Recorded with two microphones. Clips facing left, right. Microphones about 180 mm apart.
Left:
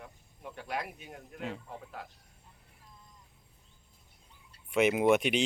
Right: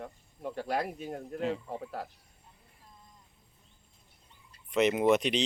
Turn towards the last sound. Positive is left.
turn(degrees=5)  # may be behind; listen again after turning